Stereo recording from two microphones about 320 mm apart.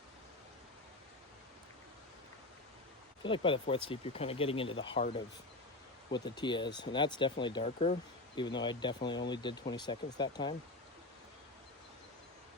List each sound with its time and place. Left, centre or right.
3.2 s speech: centre